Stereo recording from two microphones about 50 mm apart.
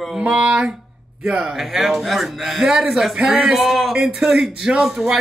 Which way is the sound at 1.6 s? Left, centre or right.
Centre.